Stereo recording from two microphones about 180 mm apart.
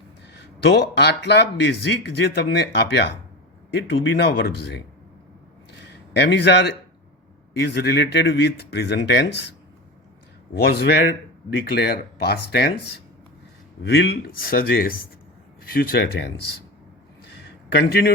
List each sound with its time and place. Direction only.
0.3 s speech: 75° left (ahead or behind)
6.1 s speech: 70° left (ahead or behind)
10.7 s speech: 65° left (ahead or behind)
17.7 s speech: 65° left (ahead or behind)